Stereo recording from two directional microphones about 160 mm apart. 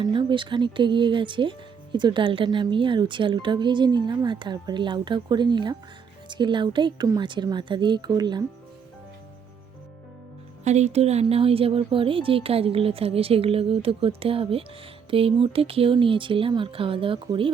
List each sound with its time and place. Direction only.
0.0 s speech: 30° right (ahead or behind)
10.6 s speech: 45° right (ahead or behind)